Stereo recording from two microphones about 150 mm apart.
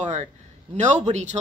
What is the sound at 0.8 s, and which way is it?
Speech, 50° right (ahead or behind).